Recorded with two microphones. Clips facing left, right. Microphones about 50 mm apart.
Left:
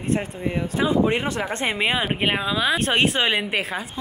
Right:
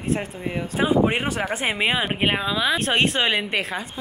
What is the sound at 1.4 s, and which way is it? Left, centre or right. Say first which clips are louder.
A woman's voice: even; centre.